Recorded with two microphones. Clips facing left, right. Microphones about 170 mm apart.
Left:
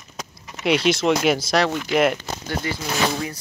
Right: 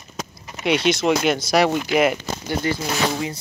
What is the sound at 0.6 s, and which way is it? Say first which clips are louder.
Speech: even; centre (ahead or behind).